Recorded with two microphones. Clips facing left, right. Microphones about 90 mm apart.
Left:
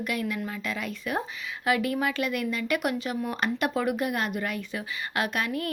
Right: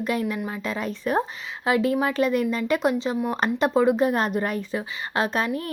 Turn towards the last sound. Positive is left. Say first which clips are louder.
# right 4 dB
turn(degrees=-30)  # may be behind; listen again after turning